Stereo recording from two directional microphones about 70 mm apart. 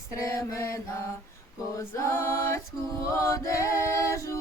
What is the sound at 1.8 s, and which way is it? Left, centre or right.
A capella, left.